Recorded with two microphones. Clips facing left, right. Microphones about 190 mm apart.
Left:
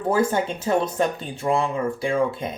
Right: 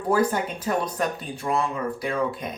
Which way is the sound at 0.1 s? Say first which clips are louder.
Left 1 dB; 25° left (ahead or behind).